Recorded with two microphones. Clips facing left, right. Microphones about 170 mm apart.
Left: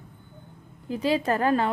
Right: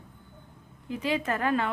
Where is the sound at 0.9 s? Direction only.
35° left (ahead or behind).